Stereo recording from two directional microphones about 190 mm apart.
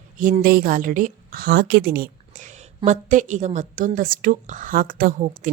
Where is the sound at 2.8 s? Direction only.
40° right (ahead or behind).